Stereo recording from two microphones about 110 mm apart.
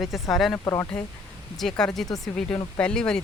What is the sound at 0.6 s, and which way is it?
Speech, 30° left (ahead or behind).